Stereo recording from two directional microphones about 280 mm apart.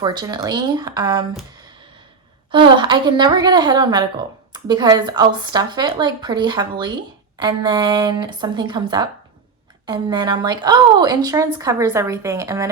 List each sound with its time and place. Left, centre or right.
0.0 s speech: centre
2.5 s speech: centre